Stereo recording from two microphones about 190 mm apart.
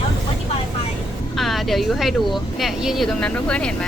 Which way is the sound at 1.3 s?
Centre (ahead or behind).